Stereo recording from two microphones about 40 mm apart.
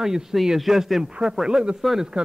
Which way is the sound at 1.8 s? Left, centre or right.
Centre.